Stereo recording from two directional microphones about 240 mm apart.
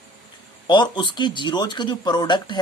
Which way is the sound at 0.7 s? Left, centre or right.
Centre.